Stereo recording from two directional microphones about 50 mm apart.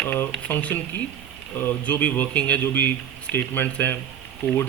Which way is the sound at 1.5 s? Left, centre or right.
Left.